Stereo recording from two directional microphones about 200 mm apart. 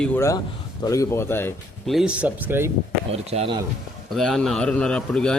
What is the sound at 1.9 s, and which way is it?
Speech, 5° right (ahead or behind).